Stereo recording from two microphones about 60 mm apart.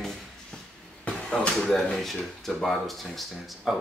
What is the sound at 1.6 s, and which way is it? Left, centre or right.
Speech, centre.